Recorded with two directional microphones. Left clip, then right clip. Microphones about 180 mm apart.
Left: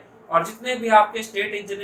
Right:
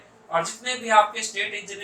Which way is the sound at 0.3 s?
35° left (ahead or behind).